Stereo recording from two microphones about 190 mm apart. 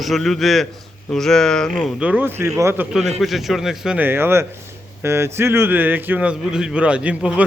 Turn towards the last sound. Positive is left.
turn(degrees=-5)  # may be behind; listen again after turning